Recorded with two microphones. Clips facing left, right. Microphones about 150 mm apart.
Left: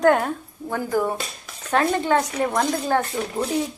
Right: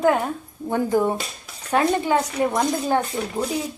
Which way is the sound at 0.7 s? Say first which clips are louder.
Right 3 dB; 20° right (ahead or behind).